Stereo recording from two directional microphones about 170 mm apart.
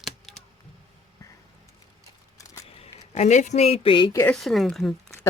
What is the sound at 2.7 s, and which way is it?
Speech, 40° left (ahead or behind).